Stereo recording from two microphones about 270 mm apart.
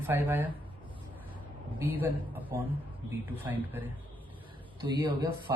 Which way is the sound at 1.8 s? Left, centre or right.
Centre.